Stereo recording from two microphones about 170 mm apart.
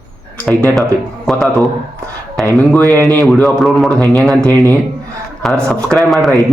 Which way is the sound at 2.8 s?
20° right (ahead or behind).